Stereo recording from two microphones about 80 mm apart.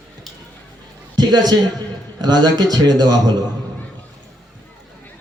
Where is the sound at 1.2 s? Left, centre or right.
Right.